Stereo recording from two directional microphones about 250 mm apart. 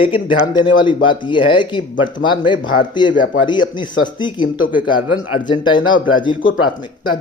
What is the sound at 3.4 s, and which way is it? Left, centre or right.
Speech, centre.